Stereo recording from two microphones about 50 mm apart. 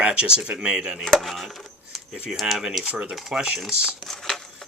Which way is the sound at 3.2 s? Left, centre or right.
Centre.